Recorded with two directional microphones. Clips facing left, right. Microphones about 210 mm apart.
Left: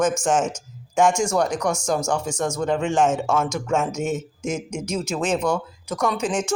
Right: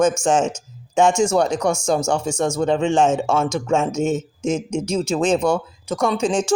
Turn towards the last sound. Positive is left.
turn(degrees=-30)  # may be behind; listen again after turning